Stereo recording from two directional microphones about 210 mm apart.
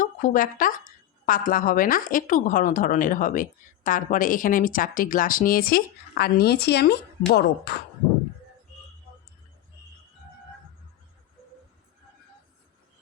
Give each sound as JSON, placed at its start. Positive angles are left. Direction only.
{"t": 0.0, "sound": "a woman's voice", "side_deg": 40}